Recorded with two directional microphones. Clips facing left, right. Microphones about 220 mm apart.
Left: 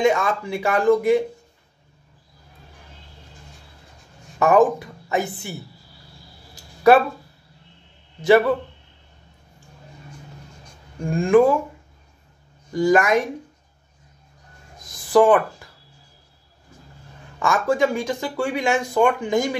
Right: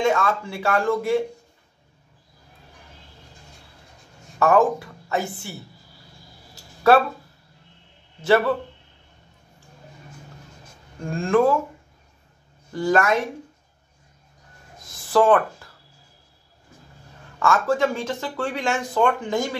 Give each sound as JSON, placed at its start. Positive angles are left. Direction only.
{"t": 0.0, "sound": "speech", "side_deg": 15}
{"t": 4.4, "sound": "speech", "side_deg": 15}
{"t": 6.5, "sound": "a sound", "side_deg": 15}
{"t": 11.1, "sound": "speech", "side_deg": 15}
{"t": 12.7, "sound": "speech", "side_deg": 15}
{"t": 14.9, "sound": "a sound", "side_deg": 15}
{"t": 17.4, "sound": "speech", "side_deg": 15}